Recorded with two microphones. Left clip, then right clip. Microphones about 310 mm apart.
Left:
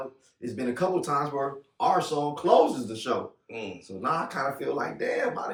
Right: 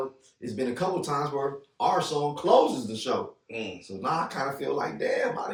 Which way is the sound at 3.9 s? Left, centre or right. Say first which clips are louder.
Even; centre.